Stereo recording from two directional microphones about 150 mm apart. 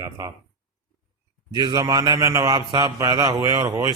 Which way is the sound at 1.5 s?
25° right (ahead or behind).